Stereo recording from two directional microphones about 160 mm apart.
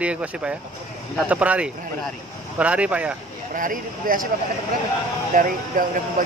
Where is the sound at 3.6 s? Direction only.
60° right (ahead or behind).